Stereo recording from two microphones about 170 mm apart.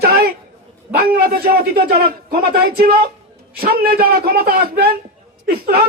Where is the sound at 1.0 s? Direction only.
60° right (ahead or behind).